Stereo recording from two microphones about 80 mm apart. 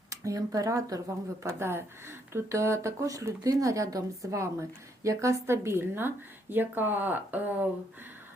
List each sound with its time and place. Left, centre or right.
0.1 s speech: right
1.5 s a woman's voice: right